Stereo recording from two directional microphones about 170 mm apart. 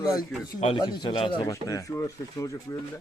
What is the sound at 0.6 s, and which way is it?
Speech, 30° left (ahead or behind).